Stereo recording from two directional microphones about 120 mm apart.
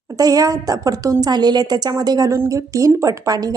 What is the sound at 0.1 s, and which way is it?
A woman's voice, 30° right (ahead or behind).